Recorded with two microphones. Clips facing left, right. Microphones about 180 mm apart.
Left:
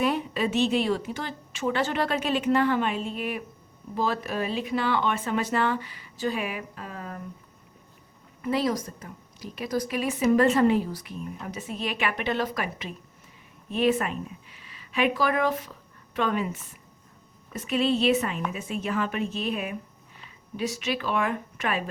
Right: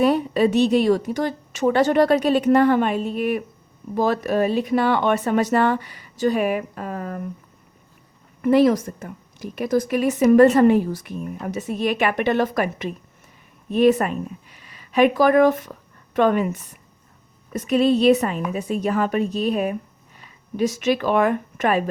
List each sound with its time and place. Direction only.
0.0 s a woman's voice: 40° right (ahead or behind)
8.4 s a woman's voice: 55° right (ahead or behind)